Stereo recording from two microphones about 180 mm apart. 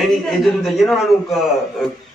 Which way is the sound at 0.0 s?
Centre (ahead or behind).